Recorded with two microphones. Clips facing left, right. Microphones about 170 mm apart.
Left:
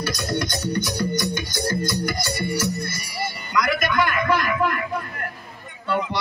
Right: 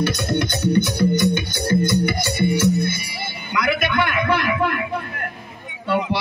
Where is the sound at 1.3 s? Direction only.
60° right (ahead or behind).